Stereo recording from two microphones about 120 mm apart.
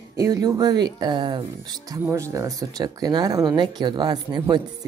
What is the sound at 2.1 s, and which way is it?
Speech, 25° right (ahead or behind).